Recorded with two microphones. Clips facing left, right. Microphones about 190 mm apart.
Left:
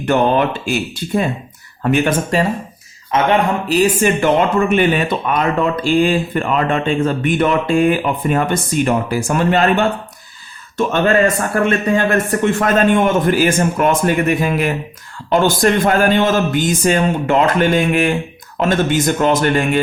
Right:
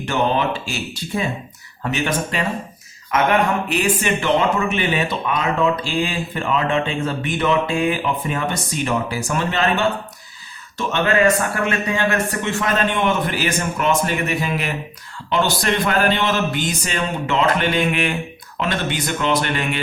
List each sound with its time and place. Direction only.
0.0 s speech: 55° left (ahead or behind)
3.1 s speech: 30° left (ahead or behind)